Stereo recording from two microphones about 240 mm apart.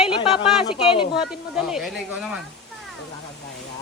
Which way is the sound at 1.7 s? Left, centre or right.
Centre.